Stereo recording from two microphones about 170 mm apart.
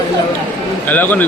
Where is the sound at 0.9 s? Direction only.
10° left (ahead or behind).